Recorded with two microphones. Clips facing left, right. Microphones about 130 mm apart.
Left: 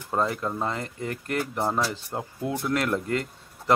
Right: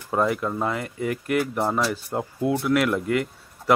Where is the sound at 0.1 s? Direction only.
5° right (ahead or behind).